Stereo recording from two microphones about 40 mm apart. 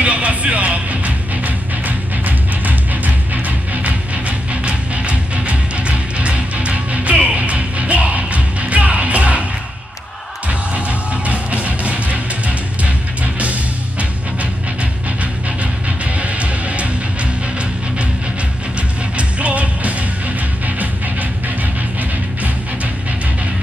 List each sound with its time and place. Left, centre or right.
0.0 s music: right
10.5 s music: right
16.2 s music: right